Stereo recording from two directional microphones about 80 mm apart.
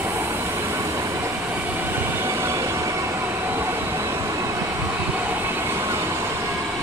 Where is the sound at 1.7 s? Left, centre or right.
Right.